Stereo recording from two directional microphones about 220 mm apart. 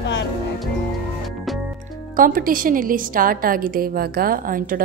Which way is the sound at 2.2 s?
40° right (ahead or behind).